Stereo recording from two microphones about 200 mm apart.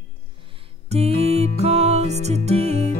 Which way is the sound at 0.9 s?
30° right (ahead or behind).